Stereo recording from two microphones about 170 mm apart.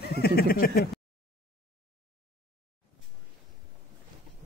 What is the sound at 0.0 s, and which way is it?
Speech, 70° left (ahead or behind).